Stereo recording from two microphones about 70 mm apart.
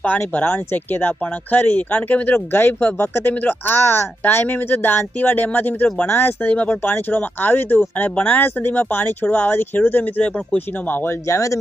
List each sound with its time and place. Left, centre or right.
0.0 s speech: left